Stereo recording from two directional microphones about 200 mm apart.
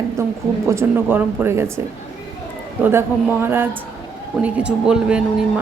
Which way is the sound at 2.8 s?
10° right (ahead or behind).